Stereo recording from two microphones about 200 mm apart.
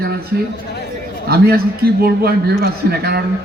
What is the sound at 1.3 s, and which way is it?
A man's voice, 50° right (ahead or behind).